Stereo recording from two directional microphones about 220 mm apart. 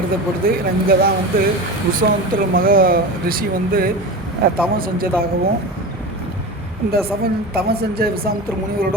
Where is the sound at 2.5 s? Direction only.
40° right (ahead or behind).